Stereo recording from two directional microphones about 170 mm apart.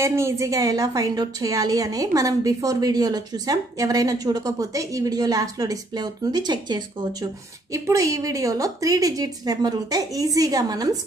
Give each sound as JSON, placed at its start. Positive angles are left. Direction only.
{"t": 0.0, "sound": "a woman's voice", "side_deg": -15}